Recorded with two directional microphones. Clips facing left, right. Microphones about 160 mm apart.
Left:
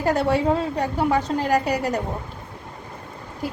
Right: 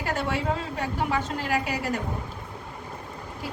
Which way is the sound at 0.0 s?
35° left (ahead or behind).